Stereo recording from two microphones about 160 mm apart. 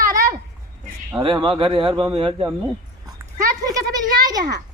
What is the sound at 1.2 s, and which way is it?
Speech, 30° right (ahead or behind).